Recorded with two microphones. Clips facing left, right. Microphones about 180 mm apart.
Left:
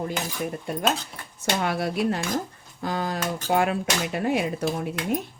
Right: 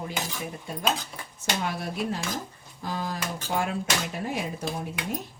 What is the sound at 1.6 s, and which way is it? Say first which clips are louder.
Speech: left 7 dB; 70° left (ahead or behind).